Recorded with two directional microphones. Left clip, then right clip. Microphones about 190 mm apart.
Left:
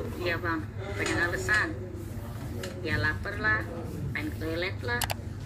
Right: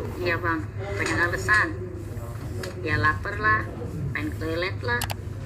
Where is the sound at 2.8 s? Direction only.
35° right (ahead or behind).